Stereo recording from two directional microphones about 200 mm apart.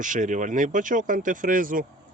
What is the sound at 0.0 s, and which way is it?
Speech, 40° right (ahead or behind).